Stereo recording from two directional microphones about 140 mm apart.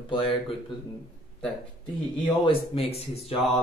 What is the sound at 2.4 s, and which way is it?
Speech, 40° left (ahead or behind).